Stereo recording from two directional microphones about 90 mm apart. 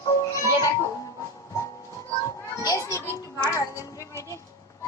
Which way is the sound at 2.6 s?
35° left (ahead or behind).